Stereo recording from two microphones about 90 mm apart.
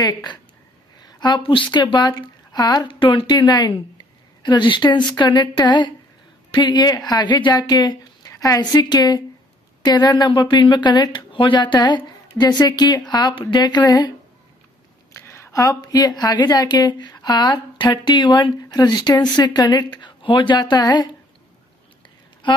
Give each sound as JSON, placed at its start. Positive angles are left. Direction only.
{"t": 0.0, "sound": "a woman's voice", "side_deg": 50}
{"t": 2.9, "sound": "a woman's voice", "side_deg": 70}
{"t": 15.1, "sound": "a woman's voice", "side_deg": 30}